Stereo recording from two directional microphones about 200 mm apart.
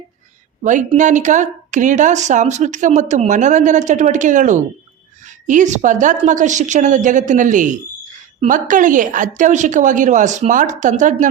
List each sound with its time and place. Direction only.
0.6 s a woman's voice: 35° right (ahead or behind)